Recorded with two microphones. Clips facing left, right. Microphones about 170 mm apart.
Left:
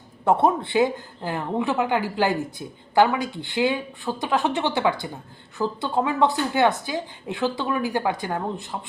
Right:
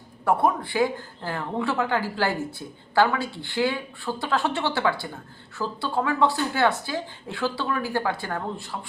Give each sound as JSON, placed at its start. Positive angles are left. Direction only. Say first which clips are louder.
{"t": 0.3, "sound": "a woman's voice", "louder": "left 3 dB", "side_deg": 25}